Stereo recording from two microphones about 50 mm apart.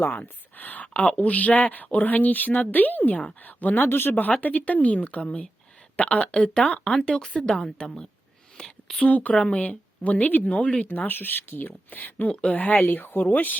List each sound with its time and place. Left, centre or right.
0.2 s speech: left
3.8 s speech: left
4.1 s speech: left
6.7 s a woman's voice: centre
8.6 s a sound: left
9.0 s speech: left
9.3 s speech: centre
9.6 s speech: left
10.8 s speech: left
12.3 s speech: centre
12.5 s speech: left
12.8 s speech: left